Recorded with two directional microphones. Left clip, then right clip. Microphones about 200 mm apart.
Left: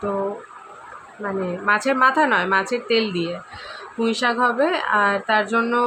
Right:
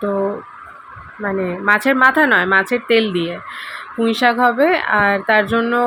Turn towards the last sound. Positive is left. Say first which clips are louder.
# right 4 dB
turn(degrees=-10)  # may be behind; listen again after turning